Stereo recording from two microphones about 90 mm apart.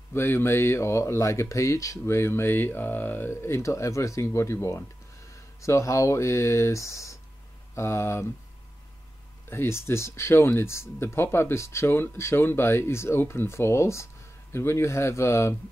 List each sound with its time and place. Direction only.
0.1 s speech: 25° left (ahead or behind)
9.5 s speech: 30° left (ahead or behind)